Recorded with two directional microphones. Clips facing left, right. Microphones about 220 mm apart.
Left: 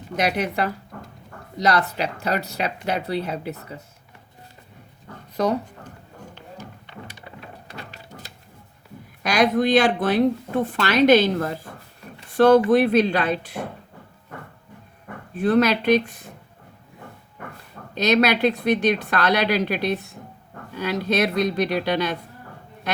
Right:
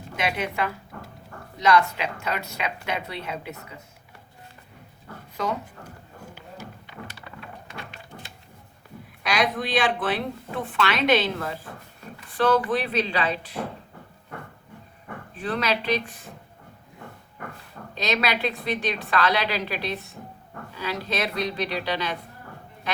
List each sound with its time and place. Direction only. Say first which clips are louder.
0.2 s speech: left 4 dB; 40° left (ahead or behind)
6.2 s run: left 1 dB; 10° right (ahead or behind)
7.7 s a sound: left 1 dB; 40° left (ahead or behind)
9.2 s speech: left 7 dB; 45° left (ahead or behind)
15.4 s speech: left 9 dB; 50° left (ahead or behind)
18.0 s speech: left 7 dB; 45° left (ahead or behind)